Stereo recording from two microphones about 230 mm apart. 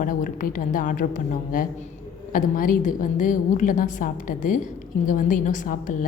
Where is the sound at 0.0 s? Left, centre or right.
Left.